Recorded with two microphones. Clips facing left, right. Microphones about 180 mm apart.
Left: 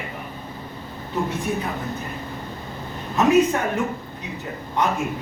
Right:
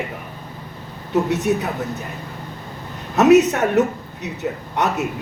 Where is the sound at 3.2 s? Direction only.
75° right (ahead or behind).